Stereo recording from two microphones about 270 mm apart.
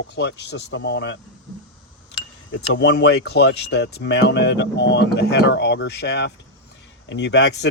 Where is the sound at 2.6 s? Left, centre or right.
Left.